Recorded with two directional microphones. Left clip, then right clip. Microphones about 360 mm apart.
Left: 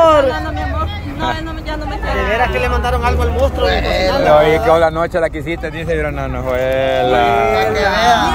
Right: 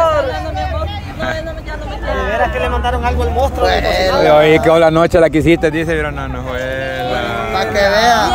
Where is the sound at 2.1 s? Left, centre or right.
Left.